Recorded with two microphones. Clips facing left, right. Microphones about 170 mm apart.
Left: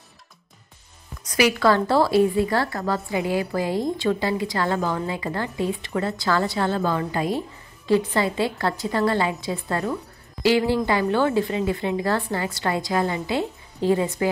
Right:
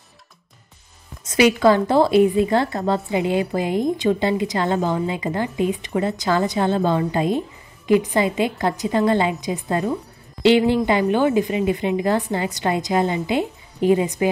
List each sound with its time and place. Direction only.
1.2 s a woman's voice: 25° right (ahead or behind)